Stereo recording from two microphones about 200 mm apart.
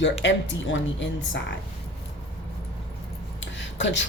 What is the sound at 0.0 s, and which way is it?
Speech, 65° left (ahead or behind).